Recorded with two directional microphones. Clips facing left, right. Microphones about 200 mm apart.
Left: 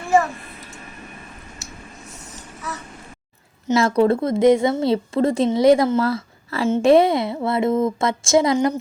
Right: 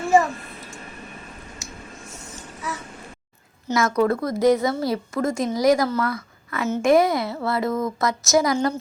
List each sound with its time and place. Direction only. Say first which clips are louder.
3.7 s a woman's voice: left 4 dB; 30° left (ahead or behind)